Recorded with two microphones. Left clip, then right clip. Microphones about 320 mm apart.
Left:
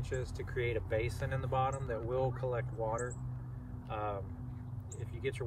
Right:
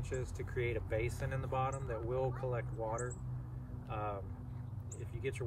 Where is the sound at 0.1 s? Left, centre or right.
Centre.